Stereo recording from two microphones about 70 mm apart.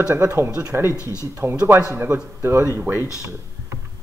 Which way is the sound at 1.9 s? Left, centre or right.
Right.